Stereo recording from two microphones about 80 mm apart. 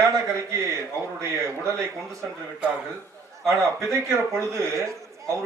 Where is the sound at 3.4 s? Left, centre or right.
Right.